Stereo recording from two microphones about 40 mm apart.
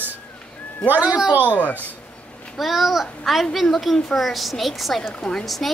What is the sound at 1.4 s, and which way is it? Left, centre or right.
Speech, left.